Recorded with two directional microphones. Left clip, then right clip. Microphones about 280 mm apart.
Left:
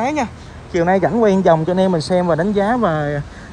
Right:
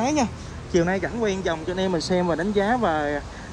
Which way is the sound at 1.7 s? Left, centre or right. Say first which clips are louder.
Left 8 dB; right.